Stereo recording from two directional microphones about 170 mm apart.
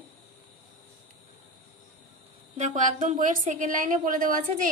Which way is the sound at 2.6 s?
45° right (ahead or behind).